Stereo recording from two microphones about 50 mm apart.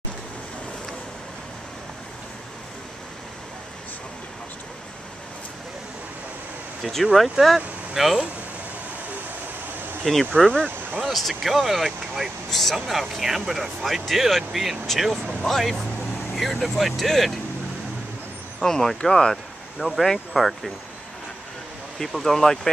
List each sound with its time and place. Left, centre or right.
6.8 s speech: centre
10.3 s speech: centre
11.1 s speech: centre
18.6 s speech: centre
20.0 s speech: centre
21.9 s speech: centre